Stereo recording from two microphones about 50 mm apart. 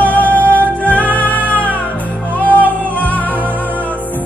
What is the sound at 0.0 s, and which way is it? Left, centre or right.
Music, left.